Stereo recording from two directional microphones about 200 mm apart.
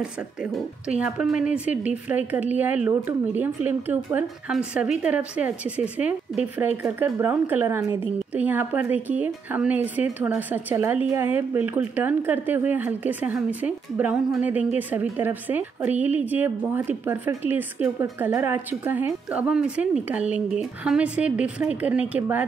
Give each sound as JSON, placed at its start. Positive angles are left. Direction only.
{"t": 0.0, "sound": "a woman's voice", "side_deg": -5}